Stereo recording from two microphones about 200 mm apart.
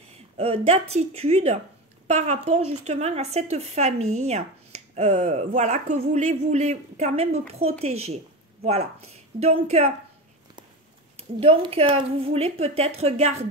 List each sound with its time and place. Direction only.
0.4 s speech: 30° right (ahead or behind)
11.1 s a woman's voice: 30° right (ahead or behind)